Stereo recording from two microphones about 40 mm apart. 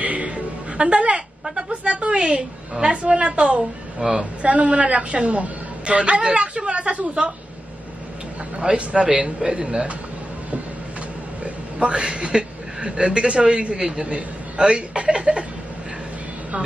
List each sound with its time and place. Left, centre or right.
0.0 s music: right
0.7 s speech: right
8.5 s speech: right
11.4 s speech: right